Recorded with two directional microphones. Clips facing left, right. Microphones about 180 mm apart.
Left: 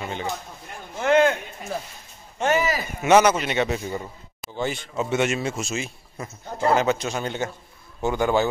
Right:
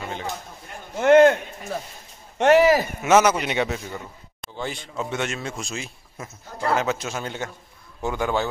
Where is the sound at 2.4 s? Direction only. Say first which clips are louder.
Right 7 dB; 70° right (ahead or behind).